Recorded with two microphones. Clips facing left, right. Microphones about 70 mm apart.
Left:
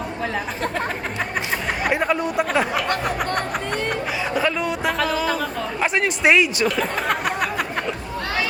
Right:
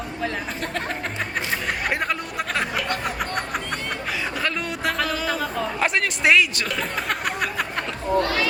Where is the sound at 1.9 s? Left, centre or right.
Centre.